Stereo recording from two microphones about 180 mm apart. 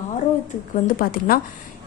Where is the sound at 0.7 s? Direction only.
55° left (ahead or behind).